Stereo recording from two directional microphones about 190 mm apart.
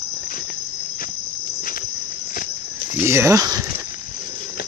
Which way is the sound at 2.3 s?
45° left (ahead or behind).